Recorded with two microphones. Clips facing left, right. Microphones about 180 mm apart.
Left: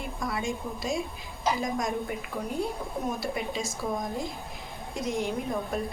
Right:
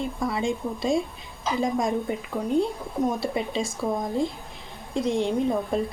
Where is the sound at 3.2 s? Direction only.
30° right (ahead or behind).